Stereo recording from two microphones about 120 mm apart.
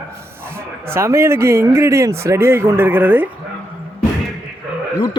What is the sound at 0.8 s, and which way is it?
Speech, 20° right (ahead or behind).